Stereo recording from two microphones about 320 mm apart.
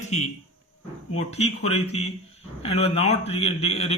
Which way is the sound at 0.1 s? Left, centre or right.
Left.